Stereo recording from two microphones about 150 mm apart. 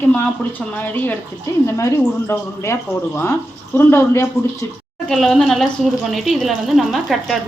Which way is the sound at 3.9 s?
15° left (ahead or behind).